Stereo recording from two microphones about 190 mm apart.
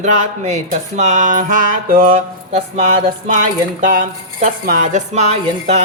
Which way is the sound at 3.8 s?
40° right (ahead or behind).